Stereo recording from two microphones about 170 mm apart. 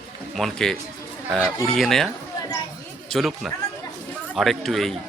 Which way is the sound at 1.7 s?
Centre (ahead or behind).